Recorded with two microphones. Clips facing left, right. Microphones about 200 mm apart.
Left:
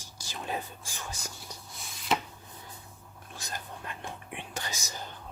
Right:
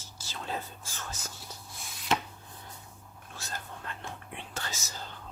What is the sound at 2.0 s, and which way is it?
Chopping, centre (ahead or behind).